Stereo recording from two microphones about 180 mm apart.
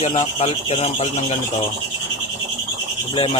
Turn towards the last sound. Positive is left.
turn(degrees=30)  # may be behind; listen again after turning